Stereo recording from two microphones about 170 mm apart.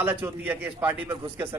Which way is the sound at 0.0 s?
10° right (ahead or behind).